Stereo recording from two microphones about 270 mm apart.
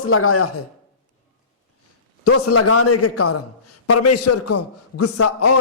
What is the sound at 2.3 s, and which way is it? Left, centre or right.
A man's voice, left.